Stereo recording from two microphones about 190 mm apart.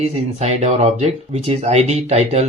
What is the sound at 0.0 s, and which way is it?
Speech, 35° right (ahead or behind).